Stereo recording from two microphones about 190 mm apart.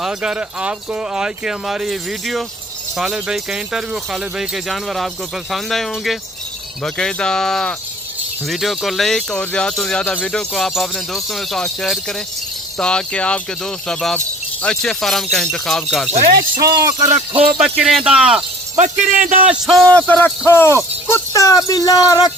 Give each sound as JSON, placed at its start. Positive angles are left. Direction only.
{"t": 0.0, "sound": "speech", "side_deg": -5}
{"t": 17.0, "sound": "speech", "side_deg": -40}
{"t": 17.6, "sound": "speech", "side_deg": 0}
{"t": 18.8, "sound": "speech", "side_deg": -40}
{"t": 19.5, "sound": "speech", "side_deg": 0}